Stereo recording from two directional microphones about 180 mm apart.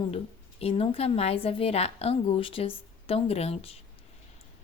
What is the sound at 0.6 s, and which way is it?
Speech, 30° left (ahead or behind).